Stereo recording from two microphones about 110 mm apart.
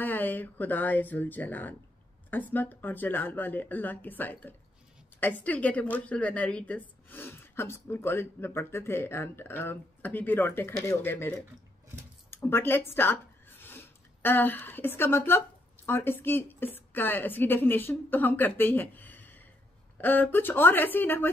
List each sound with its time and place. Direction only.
0.0 s speech: 15° left (ahead or behind)